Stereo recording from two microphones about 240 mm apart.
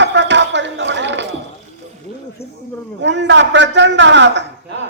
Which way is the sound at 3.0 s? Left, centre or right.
Right.